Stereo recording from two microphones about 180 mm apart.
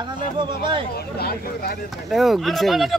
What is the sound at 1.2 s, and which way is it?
Speech, 60° left (ahead or behind).